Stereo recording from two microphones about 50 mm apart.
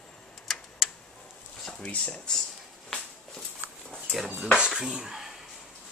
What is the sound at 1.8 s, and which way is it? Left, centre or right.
Speech, left.